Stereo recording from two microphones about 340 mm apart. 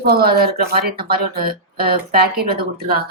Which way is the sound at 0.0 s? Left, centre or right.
Right.